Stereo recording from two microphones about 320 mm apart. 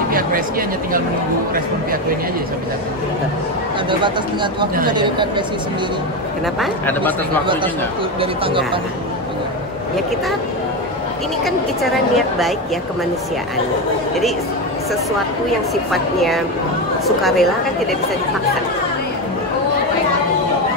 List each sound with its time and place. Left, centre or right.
0.1 s speech: right
4.0 s speech: centre
6.6 s a woman's voice: centre
8.2 s speech: centre
15.7 s a woman's voice: centre